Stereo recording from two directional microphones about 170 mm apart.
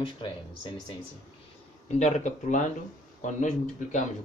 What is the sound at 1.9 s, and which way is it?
Speech, 45° left (ahead or behind).